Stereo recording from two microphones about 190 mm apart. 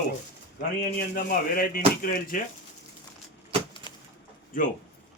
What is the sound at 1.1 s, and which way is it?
Speech, 45° left (ahead or behind).